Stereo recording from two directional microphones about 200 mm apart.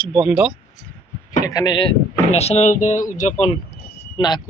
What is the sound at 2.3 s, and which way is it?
Speech, 30° left (ahead or behind).